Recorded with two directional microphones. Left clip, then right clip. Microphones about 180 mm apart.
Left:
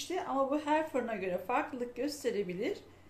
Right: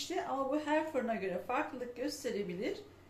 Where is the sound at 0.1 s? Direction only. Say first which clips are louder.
Left 3 dB; 60° left (ahead or behind).